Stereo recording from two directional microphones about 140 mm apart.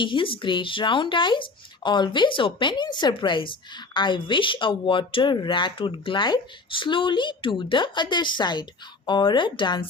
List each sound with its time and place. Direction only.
0.0 s speech: 35° left (ahead or behind)